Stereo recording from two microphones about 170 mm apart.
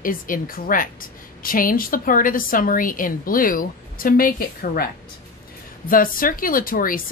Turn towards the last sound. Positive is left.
turn(degrees=55)  # may be behind; listen again after turning